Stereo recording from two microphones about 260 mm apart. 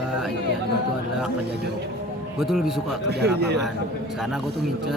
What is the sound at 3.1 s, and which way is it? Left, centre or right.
Speech, right.